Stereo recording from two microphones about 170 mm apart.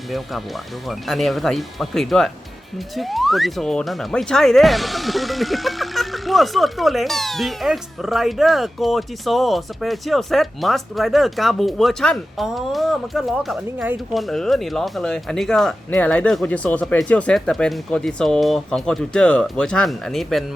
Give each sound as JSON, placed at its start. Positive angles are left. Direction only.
{"t": 0.1, "sound": "speech", "side_deg": 0}